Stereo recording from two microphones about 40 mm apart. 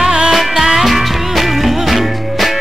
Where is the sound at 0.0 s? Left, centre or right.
Centre.